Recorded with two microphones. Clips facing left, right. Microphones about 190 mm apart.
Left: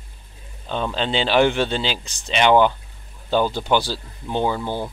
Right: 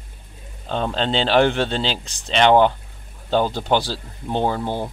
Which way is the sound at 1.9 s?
5° left (ahead or behind).